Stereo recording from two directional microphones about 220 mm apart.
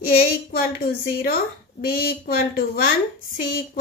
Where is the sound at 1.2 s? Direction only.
40° left (ahead or behind).